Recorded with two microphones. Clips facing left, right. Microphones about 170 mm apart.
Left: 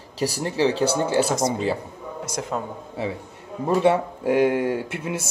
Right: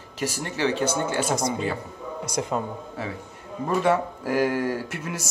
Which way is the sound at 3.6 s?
20° left (ahead or behind).